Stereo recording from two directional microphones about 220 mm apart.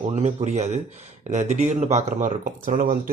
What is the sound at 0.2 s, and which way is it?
Speech, 30° right (ahead or behind).